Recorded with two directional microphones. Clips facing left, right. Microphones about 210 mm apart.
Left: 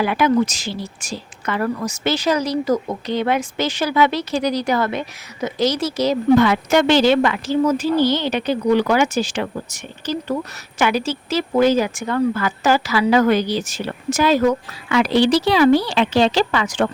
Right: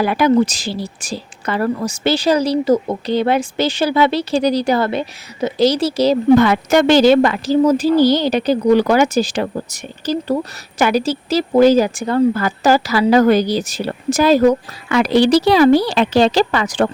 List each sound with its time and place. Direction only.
0.0 s speech: 35° right (ahead or behind)
6.3 s speech: 45° right (ahead or behind)